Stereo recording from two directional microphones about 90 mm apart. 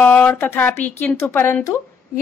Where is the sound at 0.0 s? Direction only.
20° left (ahead or behind).